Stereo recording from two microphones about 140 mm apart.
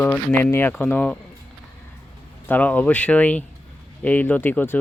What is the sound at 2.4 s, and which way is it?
Speech, 10° left (ahead or behind).